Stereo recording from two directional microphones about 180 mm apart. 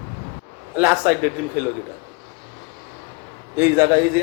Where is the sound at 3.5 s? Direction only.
15° right (ahead or behind).